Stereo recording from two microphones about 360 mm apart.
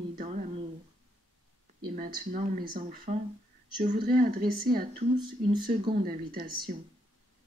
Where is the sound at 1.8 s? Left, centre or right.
Right.